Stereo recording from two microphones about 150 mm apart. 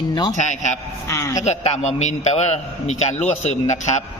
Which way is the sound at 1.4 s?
50° left (ahead or behind).